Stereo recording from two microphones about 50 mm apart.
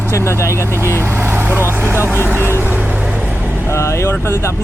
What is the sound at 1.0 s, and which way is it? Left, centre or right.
Vehicle, right.